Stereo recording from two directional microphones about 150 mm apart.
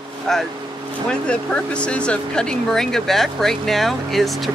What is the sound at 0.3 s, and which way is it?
Speech, 5° left (ahead or behind).